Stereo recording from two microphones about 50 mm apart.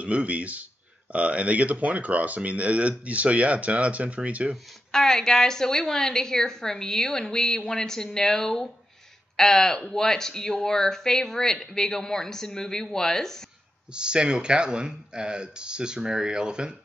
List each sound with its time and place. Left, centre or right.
0.0 s speech: right
4.9 s speech: centre
13.9 s speech: centre